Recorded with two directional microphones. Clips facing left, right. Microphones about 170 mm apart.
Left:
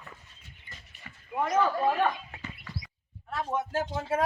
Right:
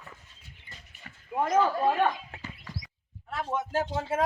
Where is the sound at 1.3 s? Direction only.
25° right (ahead or behind).